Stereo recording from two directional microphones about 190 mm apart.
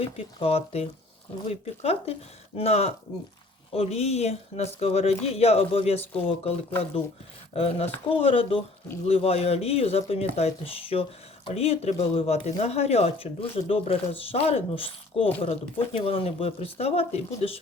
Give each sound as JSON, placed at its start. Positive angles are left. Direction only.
{"t": 0.0, "sound": "speech", "side_deg": 30}